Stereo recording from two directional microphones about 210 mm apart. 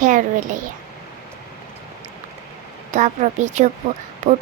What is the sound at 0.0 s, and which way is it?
Speech, 40° right (ahead or behind).